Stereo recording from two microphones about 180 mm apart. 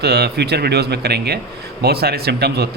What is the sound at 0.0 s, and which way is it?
Speech, 65° right (ahead or behind).